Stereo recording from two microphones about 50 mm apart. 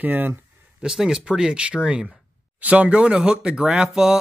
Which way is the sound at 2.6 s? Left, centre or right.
Right.